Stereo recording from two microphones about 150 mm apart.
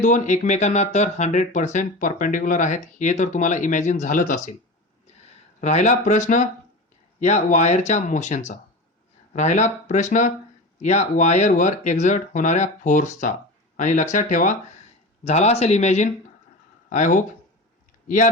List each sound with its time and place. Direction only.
0.0 s speech: 55° left (ahead or behind)
5.5 s speech: 55° left (ahead or behind)
15.2 s speech: 45° left (ahead or behind)
16.9 s speech: 60° left (ahead or behind)